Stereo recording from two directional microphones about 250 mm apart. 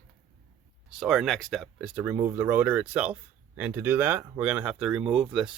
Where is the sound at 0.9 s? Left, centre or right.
Centre.